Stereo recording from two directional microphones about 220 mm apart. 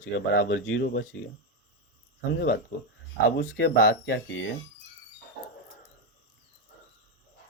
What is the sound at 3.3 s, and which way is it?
Speech, 50° left (ahead or behind).